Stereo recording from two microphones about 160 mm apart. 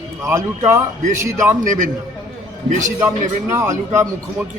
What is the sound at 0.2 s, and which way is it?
Speech, 20° right (ahead or behind).